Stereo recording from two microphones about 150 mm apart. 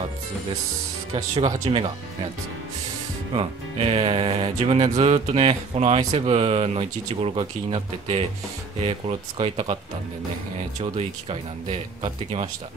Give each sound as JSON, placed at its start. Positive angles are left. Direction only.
{"t": 1.1, "sound": "speech", "side_deg": -35}
{"t": 3.3, "sound": "speech", "side_deg": -40}
{"t": 9.4, "sound": "speech", "side_deg": -40}
{"t": 10.8, "sound": "speech", "side_deg": -45}